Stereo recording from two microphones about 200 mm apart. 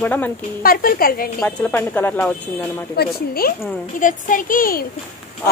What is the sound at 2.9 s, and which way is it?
A woman's voice, 50° left (ahead or behind).